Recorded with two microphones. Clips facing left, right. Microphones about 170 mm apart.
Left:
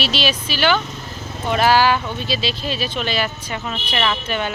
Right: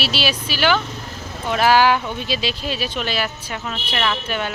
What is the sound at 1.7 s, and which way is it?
Speech, 15° right (ahead or behind).